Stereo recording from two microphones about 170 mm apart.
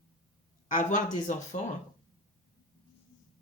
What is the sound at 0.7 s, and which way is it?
Speech, 45° left (ahead or behind).